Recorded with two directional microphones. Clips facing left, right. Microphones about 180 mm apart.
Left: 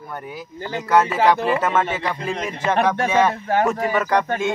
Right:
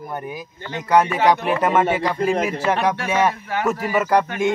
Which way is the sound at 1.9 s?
10° right (ahead or behind).